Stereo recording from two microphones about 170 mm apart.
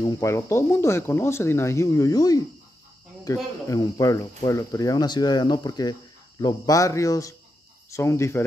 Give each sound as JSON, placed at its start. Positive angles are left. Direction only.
{"t": 0.0, "sound": "speech", "side_deg": 20}
{"t": 3.6, "sound": "speech", "side_deg": 20}